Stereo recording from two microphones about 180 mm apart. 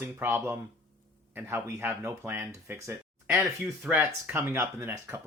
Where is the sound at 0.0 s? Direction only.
10° right (ahead or behind).